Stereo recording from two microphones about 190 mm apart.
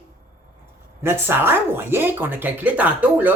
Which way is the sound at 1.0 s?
10° right (ahead or behind).